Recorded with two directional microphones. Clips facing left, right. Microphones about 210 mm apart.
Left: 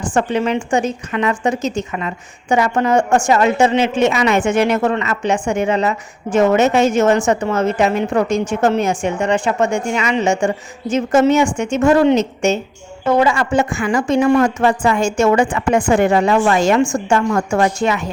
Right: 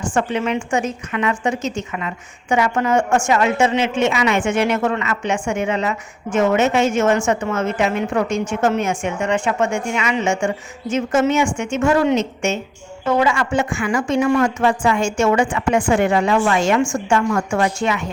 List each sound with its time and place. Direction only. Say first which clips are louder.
0.1 s a woman's voice: left 3 dB; 35° left (ahead or behind)